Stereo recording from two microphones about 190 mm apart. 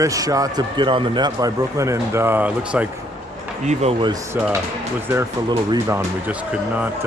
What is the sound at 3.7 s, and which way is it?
Speech, 35° right (ahead or behind).